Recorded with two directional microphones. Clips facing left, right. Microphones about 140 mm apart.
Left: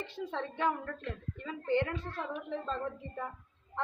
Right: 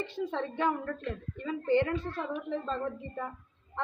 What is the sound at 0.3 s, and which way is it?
A woman's voice, centre (ahead or behind).